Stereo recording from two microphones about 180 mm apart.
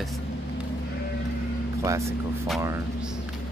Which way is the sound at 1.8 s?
15° right (ahead or behind).